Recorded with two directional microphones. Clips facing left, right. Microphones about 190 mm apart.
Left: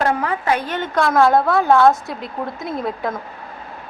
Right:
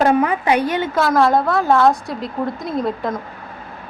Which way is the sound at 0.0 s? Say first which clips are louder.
Right 4 dB; 20° right (ahead or behind).